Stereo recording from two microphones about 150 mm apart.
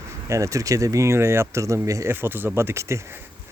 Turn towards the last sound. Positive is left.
turn(degrees=-20)  # may be behind; listen again after turning